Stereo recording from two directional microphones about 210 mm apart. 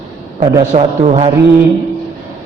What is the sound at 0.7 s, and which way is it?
Speech, 30° right (ahead or behind).